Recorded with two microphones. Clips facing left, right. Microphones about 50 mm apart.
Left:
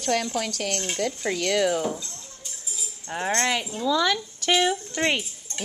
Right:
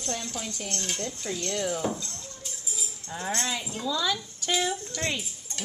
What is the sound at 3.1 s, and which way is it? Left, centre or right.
Speech, left.